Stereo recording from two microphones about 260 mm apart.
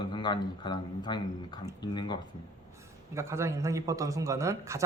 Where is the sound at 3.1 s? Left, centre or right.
Centre.